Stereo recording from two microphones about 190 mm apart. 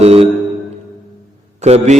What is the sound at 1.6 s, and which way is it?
Mantra, 35° right (ahead or behind).